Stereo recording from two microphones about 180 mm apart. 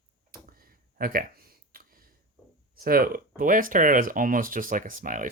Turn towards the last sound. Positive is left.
turn(degrees=-50)  # may be behind; listen again after turning